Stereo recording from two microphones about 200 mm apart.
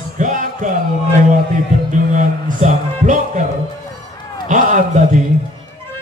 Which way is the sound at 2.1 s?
40° right (ahead or behind).